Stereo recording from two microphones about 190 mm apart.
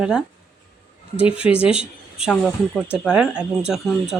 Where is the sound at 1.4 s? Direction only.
5° right (ahead or behind).